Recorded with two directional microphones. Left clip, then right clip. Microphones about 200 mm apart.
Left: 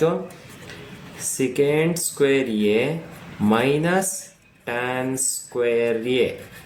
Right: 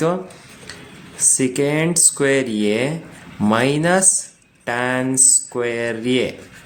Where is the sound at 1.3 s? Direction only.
30° right (ahead or behind).